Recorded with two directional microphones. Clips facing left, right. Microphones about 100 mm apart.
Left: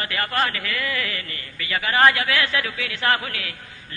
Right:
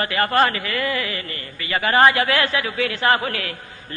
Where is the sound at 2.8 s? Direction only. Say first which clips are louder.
Right 6 dB; 35° right (ahead or behind).